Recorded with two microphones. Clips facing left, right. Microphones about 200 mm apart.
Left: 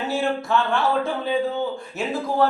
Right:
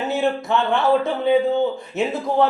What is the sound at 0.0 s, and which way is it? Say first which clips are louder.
A man's voice: right 3 dB; 20° right (ahead or behind).